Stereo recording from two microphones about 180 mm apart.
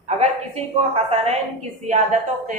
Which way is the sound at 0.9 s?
35° right (ahead or behind).